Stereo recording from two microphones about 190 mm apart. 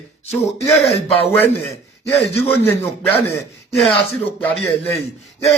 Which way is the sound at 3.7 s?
Centre (ahead or behind).